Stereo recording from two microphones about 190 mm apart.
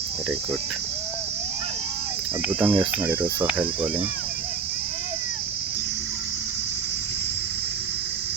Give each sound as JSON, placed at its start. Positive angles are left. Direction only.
{"t": 2.6, "sound": "cricket", "side_deg": -25}
{"t": 3.0, "sound": "cricket", "side_deg": -10}